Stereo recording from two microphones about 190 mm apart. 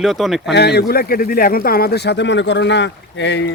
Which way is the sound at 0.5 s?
60° left (ahead or behind).